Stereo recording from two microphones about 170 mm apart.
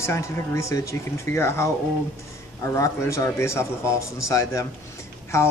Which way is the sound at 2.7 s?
20° left (ahead or behind).